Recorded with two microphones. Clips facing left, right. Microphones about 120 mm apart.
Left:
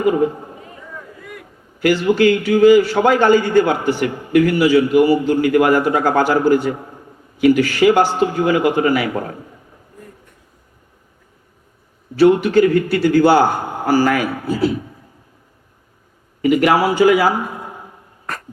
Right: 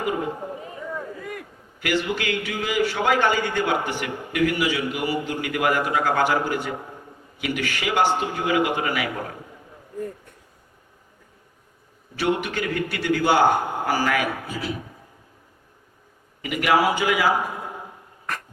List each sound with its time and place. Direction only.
1.8 s a man's voice: 35° left (ahead or behind)
12.1 s a man's voice: 35° left (ahead or behind)
16.4 s a man's voice: 35° left (ahead or behind)